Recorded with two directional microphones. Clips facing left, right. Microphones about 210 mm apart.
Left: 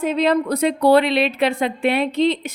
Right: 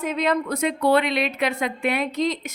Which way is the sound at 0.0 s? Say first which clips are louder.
Left 5 dB; 30° left (ahead or behind).